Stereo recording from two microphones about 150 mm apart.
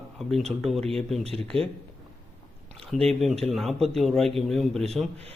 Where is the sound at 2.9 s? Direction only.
Centre (ahead or behind).